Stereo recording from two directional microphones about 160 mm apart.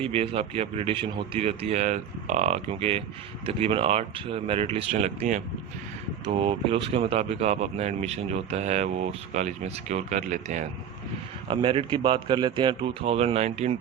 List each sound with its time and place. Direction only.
0.0 s a man's voice: 35° right (ahead or behind)
6.2 s a man's voice: 35° right (ahead or behind); by 10.7 s 50° right (ahead or behind)
11.4 s a man's voice: 30° right (ahead or behind)